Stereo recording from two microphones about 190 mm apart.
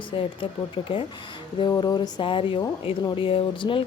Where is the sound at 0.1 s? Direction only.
25° left (ahead or behind).